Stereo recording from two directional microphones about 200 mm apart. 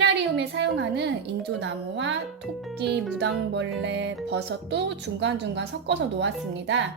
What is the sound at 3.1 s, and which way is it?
Speech, 60° right (ahead or behind).